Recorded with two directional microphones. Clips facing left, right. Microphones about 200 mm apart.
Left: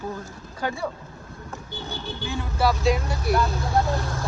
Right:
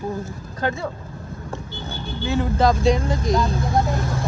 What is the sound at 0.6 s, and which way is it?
Speech, 15° right (ahead or behind).